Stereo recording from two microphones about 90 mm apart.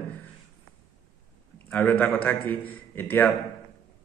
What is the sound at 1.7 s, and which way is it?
A man's voice, 20° left (ahead or behind).